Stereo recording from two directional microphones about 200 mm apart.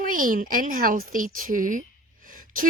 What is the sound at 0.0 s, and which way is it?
A woman's voice, 45° right (ahead or behind).